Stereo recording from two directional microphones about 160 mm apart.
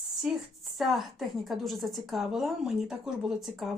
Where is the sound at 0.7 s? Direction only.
Centre (ahead or behind).